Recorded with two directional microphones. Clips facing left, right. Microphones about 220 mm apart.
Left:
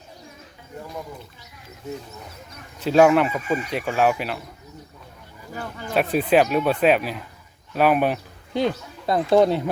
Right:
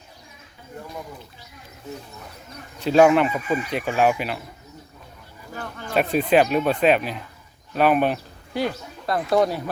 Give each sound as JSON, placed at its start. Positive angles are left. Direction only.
{"t": 2.8, "sound": "speech", "side_deg": 0}
{"t": 5.5, "sound": "speech", "side_deg": 10}
{"t": 8.5, "sound": "speech", "side_deg": 25}